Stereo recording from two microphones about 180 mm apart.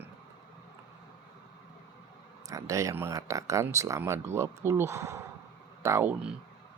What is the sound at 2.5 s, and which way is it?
Speech, 20° right (ahead or behind).